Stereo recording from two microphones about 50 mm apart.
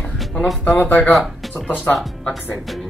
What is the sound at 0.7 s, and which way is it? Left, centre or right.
Speech, left.